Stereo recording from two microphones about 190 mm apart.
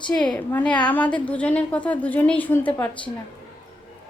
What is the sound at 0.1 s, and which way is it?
A woman's voice, 5° left (ahead or behind).